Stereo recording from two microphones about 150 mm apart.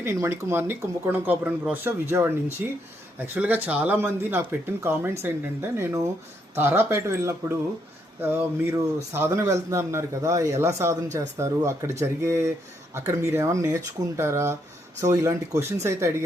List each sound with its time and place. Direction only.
0.0 s a man's voice: 20° right (ahead or behind)